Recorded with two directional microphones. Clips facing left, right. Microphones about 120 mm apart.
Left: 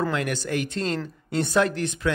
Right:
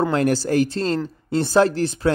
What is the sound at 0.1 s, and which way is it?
Speech, 35° right (ahead or behind).